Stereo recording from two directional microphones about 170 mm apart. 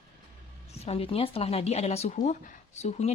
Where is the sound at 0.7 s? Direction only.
35° left (ahead or behind).